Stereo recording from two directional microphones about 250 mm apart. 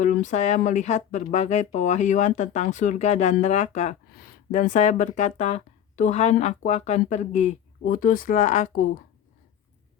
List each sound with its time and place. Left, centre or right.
0.0 s speech: left